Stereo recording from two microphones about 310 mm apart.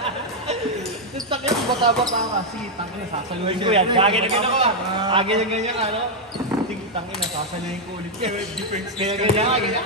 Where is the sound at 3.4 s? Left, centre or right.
Centre.